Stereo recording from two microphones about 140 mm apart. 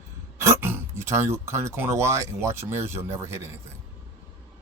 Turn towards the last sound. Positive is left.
turn(degrees=-20)  # may be behind; listen again after turning